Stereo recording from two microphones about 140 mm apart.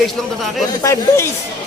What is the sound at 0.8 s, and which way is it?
Speech, 20° left (ahead or behind).